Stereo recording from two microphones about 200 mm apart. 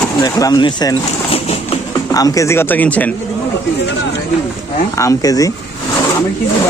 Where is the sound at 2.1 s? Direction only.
15° left (ahead or behind).